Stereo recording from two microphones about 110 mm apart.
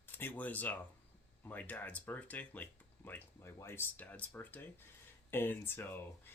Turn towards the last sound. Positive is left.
turn(degrees=20)  # may be behind; listen again after turning